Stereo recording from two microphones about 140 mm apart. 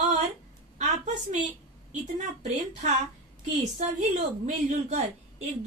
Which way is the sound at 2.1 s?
60° right (ahead or behind).